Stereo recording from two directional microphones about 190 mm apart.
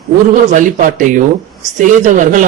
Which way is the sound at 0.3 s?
45° right (ahead or behind).